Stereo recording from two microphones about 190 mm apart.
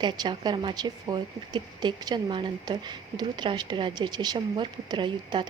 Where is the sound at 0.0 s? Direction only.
25° right (ahead or behind).